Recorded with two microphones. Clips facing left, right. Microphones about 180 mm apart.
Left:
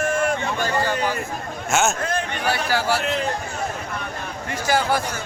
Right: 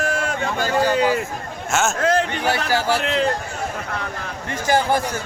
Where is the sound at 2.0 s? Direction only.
85° right.